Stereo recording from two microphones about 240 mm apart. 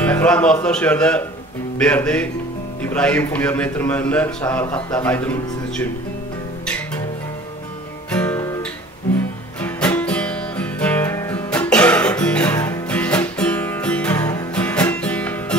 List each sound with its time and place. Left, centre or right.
0.0 s a man's voice: centre
8.1 s guitar: centre
9.6 s music: centre